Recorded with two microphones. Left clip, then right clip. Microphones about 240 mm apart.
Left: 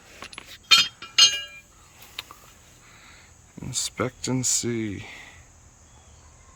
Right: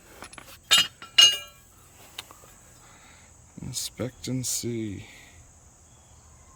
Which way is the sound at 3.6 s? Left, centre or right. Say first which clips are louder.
Left 5 dB; centre.